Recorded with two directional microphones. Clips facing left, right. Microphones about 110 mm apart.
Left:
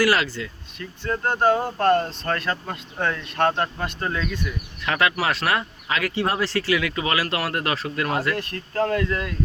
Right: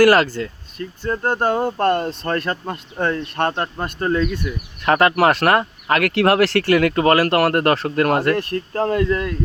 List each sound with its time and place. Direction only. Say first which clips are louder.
0.0 s speech: right 8 dB; 45° right (ahead or behind)
5.1 s speech: right 8 dB; 55° right (ahead or behind)
8.7 s speech: right 3 dB; 30° right (ahead or behind)